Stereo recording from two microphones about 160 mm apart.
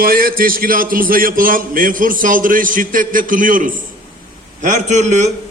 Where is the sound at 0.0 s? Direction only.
65° right (ahead or behind).